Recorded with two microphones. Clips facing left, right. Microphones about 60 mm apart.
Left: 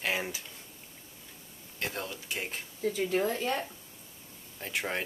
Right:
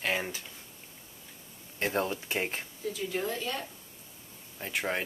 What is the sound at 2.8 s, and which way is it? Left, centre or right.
Speech, left.